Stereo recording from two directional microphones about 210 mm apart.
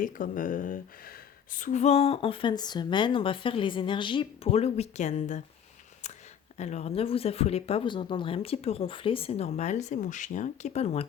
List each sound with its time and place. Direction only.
0.0 s speech: 40° left (ahead or behind)
6.6 s speech: 30° left (ahead or behind)